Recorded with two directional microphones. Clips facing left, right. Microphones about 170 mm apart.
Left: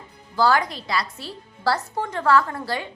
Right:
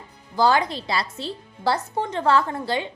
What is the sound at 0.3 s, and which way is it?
A woman's voice, 20° right (ahead or behind).